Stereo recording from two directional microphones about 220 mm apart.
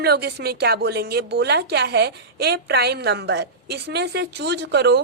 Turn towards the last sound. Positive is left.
turn(degrees=-50)  # may be behind; listen again after turning